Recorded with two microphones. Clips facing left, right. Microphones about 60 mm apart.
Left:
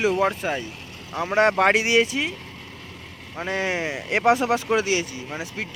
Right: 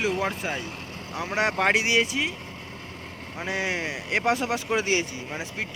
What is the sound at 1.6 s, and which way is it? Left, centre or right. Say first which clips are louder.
Speech: left 4 dB; centre.